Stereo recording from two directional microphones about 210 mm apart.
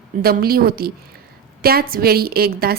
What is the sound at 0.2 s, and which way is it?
A woman's voice, 45° right (ahead or behind).